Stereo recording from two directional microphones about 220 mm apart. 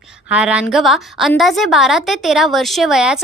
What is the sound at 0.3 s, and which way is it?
A woman's voice, 5° right (ahead or behind).